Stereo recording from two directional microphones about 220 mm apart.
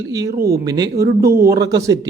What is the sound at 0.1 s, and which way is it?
A man's voice, 15° right (ahead or behind).